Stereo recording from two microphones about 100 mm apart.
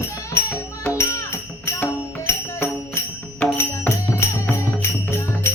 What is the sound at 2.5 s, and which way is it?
Music, 25° left (ahead or behind).